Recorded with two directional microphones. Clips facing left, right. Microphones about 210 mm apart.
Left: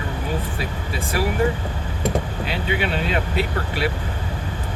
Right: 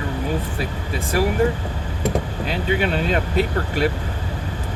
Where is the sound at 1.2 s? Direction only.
45° right (ahead or behind).